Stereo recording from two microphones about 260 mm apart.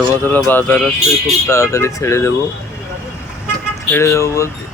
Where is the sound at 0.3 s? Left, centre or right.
Centre.